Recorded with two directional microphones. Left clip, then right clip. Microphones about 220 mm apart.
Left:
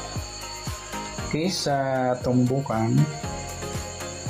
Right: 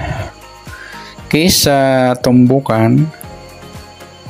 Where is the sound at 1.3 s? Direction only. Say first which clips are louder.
Right 14 dB; 50° right (ahead or behind).